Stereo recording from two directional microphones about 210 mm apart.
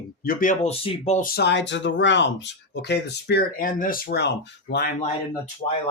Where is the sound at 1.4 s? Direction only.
55° left (ahead or behind).